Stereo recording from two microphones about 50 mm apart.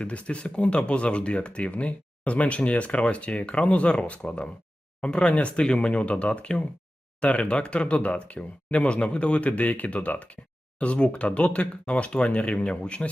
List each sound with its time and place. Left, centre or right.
0.0 s speech: left